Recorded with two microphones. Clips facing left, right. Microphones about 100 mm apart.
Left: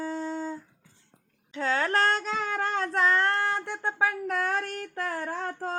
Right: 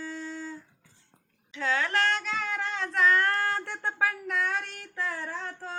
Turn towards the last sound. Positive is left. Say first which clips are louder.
# left 5 dB
turn(degrees=45)  # may be behind; listen again after turning